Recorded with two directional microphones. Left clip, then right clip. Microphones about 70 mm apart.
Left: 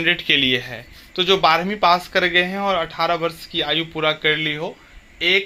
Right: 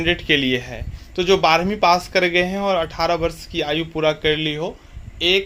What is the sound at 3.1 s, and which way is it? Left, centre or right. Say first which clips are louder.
Speech: right 1 dB; right.